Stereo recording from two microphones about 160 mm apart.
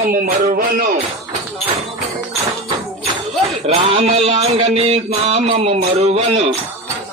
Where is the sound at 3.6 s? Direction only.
40° right (ahead or behind).